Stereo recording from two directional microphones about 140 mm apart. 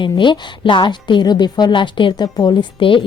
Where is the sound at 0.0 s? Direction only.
35° left (ahead or behind).